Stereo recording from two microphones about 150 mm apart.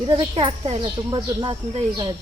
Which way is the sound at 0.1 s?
35° right (ahead or behind).